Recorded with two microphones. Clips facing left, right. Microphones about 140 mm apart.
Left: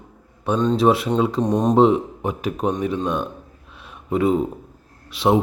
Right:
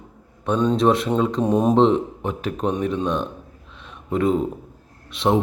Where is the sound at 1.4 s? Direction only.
5° right (ahead or behind).